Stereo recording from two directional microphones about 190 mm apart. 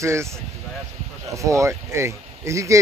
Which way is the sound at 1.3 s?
15° right (ahead or behind).